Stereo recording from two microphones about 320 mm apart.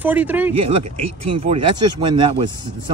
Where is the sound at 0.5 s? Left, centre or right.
Centre.